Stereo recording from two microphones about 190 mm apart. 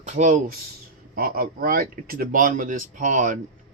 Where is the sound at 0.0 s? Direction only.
40° right (ahead or behind).